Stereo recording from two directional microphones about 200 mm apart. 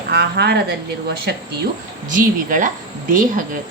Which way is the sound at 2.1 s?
40° right (ahead or behind).